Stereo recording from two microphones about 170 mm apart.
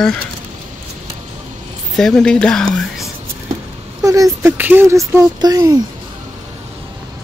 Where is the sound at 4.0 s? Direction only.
20° right (ahead or behind).